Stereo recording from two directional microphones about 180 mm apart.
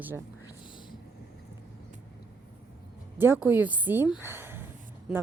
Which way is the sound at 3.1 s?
10° right (ahead or behind).